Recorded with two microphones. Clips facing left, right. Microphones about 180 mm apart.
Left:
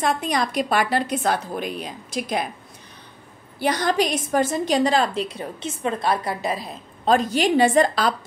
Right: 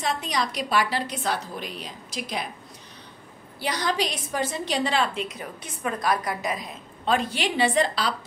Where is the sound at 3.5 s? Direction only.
50° left (ahead or behind).